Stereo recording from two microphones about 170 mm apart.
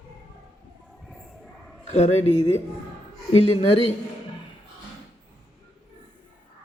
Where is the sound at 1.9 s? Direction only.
40° left (ahead or behind).